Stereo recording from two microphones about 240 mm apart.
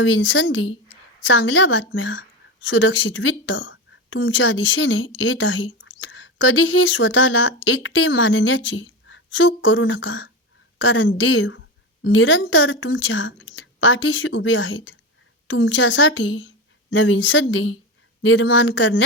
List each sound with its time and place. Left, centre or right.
0.0 s a woman's voice: left